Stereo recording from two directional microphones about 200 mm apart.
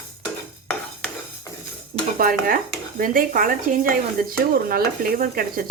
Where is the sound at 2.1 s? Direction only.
45° right (ahead or behind).